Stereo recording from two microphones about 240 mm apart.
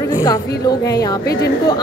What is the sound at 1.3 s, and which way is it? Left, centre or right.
Speech, left.